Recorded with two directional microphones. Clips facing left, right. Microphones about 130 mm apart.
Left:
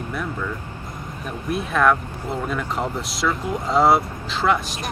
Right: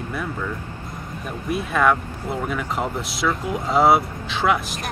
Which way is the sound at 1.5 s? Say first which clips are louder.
Even; centre (ahead or behind).